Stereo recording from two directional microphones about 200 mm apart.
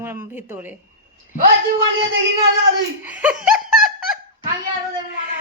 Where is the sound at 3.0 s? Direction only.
10° right (ahead or behind).